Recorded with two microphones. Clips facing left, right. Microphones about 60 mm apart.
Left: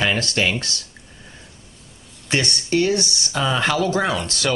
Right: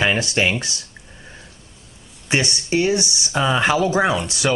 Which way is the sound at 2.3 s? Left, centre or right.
Centre.